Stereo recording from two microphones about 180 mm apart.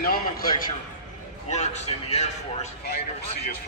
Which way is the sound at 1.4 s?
40° left (ahead or behind).